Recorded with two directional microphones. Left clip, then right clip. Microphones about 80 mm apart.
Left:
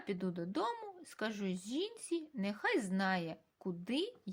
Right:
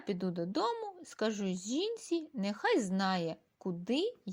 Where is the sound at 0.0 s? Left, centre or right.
Right.